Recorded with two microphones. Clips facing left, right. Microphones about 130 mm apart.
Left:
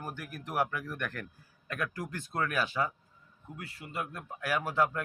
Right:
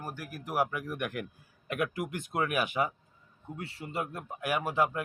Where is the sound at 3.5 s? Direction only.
25° right (ahead or behind).